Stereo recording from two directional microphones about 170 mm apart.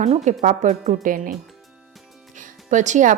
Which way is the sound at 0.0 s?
45° right (ahead or behind).